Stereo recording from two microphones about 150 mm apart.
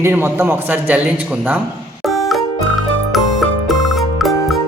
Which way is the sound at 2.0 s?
Centre (ahead or behind).